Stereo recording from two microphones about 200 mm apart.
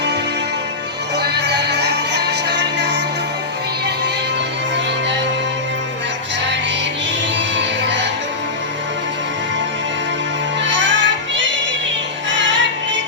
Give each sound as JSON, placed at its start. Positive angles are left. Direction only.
{"t": 1.2, "sound": "music", "side_deg": -55}
{"t": 7.3, "sound": "music", "side_deg": -65}
{"t": 10.6, "sound": "music", "side_deg": -65}